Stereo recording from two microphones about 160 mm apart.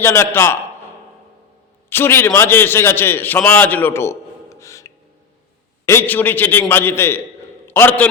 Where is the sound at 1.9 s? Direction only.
15° left (ahead or behind).